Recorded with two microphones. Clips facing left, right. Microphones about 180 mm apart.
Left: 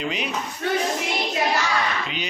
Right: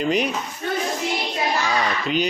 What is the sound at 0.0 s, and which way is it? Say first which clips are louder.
Speech: right 7 dB; 45° right (ahead or behind).